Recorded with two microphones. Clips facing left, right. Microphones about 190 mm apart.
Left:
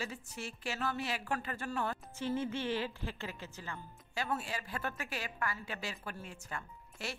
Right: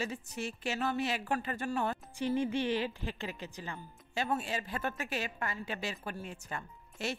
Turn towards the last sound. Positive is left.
turn(degrees=-20)  # may be behind; listen again after turning